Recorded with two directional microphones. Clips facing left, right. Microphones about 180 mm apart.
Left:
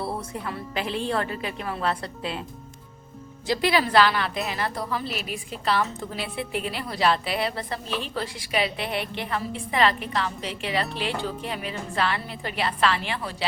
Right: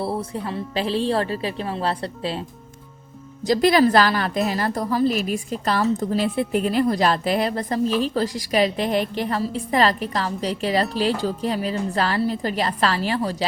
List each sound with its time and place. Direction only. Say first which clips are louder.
0.0 s a woman's voice: right 5 dB; 30° right (ahead or behind)
3.4 s a woman's voice: right 7 dB; 40° right (ahead or behind)